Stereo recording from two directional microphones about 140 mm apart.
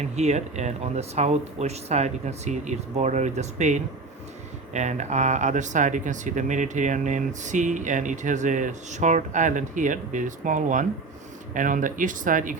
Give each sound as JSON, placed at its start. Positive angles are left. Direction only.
{"t": 0.0, "sound": "speech", "side_deg": -50}